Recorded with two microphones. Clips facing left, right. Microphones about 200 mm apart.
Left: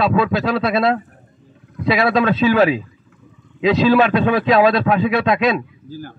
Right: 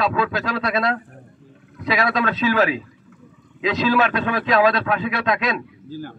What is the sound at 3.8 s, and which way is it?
Speech, 30° left (ahead or behind).